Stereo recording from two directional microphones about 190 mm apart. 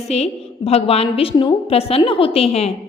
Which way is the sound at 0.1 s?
35° left (ahead or behind).